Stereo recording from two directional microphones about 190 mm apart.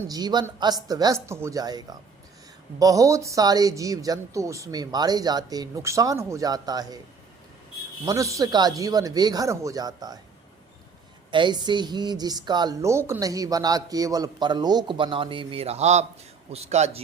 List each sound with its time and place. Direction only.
0.1 s speech: 20° right (ahead or behind)
8.0 s speech: 15° right (ahead or behind)
11.3 s a man's voice: 25° right (ahead or behind)